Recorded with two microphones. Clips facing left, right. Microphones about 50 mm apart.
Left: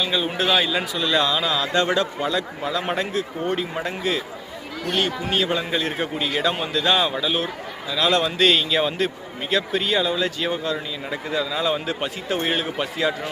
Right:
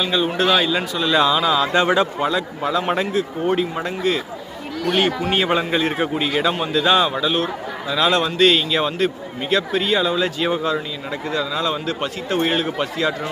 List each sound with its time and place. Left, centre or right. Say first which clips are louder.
0.0 s a man's voice: right 4 dB; centre
2.3 s speech: right 4 dB; centre
5.3 s a man's voice: right 4 dB; right
5.8 s a man's voice: right 4 dB; centre
11.1 s speech: right 2 dB; centre